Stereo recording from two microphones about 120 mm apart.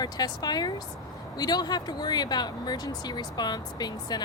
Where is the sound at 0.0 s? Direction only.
35° left (ahead or behind).